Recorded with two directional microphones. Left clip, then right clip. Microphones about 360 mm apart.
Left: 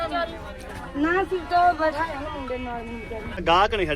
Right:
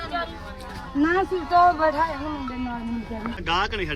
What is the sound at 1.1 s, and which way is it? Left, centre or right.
Speech, centre.